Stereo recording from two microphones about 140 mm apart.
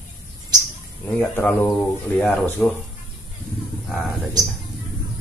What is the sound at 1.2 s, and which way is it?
Speech, 10° left (ahead or behind).